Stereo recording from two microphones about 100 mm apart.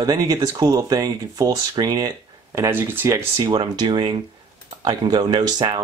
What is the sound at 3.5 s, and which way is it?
Speech, 45° right (ahead or behind).